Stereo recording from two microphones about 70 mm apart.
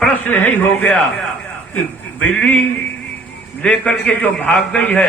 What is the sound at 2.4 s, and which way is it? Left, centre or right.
A man's voice, left.